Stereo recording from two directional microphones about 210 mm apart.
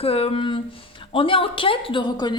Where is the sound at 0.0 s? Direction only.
25° left (ahead or behind).